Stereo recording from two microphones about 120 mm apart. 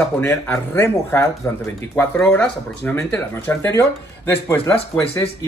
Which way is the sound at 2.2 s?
10° left (ahead or behind).